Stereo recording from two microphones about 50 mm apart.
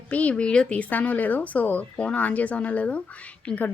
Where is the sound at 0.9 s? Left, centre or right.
Left.